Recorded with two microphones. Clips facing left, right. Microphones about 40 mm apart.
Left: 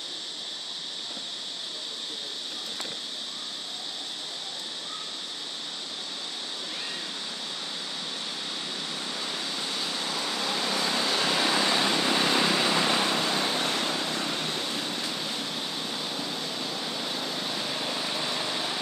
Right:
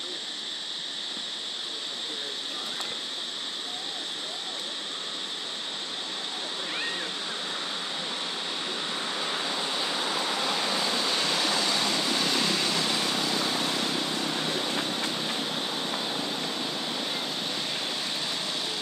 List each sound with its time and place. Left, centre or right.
8.9 s waves: right
10.8 s vehicle: centre; by 13.9 s left
14.5 s a sound: right
14.9 s a sound: centre
15.3 s vehicle: centre
17.9 s vehicle: centre